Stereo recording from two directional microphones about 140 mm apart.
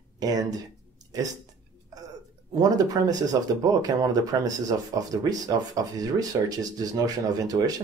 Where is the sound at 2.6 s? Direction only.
25° right (ahead or behind).